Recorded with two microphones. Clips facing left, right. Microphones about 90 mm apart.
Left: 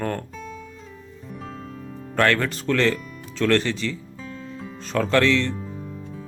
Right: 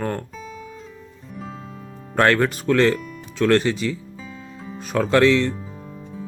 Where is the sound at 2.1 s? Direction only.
20° right (ahead or behind).